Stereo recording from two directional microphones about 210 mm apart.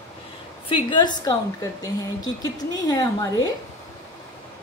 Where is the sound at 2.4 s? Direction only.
20° left (ahead or behind).